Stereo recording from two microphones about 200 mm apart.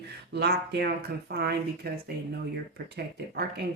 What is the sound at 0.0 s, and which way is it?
Speech, 55° right (ahead or behind).